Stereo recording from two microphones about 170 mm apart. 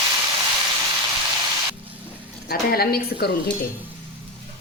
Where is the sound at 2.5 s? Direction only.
65° left (ahead or behind).